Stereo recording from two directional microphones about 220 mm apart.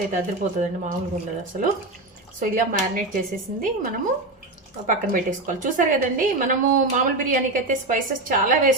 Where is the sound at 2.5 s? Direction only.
40° right (ahead or behind).